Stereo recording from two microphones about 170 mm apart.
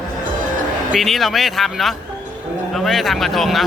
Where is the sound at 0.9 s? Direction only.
Centre (ahead or behind).